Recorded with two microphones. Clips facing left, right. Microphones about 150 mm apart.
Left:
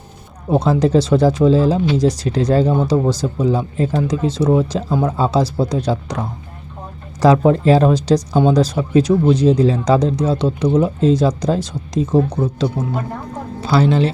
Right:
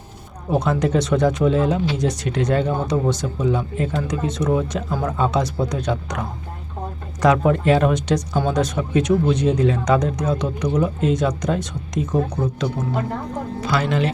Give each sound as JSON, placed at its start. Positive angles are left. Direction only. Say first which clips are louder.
{"t": 0.5, "sound": "speech", "louder": "left 5 dB", "side_deg": 30}